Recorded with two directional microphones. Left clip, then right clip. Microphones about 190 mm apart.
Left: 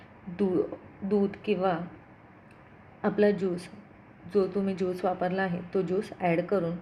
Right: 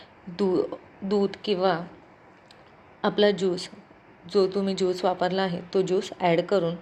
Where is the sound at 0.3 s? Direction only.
20° right (ahead or behind).